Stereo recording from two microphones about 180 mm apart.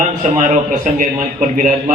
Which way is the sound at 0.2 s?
45° right (ahead or behind).